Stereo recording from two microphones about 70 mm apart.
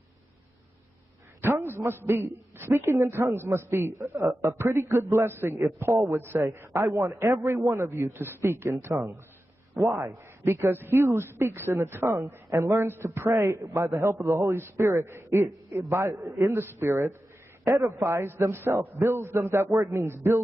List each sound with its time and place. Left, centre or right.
1.4 s a sound: right
1.8 s a woman's voice: right
8.1 s a woman's voice: right
9.9 s a man's voice: right
10.6 s a woman's voice: right